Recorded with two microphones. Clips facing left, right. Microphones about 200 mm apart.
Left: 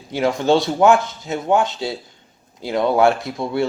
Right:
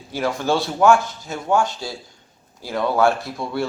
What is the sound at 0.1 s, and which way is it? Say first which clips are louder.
Speech: left 5 dB; 20° left (ahead or behind).